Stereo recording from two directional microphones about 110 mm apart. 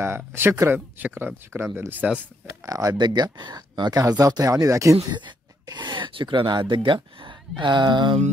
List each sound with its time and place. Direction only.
0.3 s speech: 25° right (ahead or behind)
2.6 s speech: 30° right (ahead or behind)
5.1 s speech: 40° right (ahead or behind)